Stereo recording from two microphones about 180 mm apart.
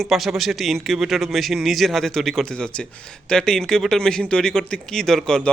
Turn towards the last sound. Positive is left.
turn(degrees=5)  # may be behind; listen again after turning